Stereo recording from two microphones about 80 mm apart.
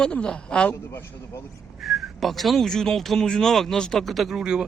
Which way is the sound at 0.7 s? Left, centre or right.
Left.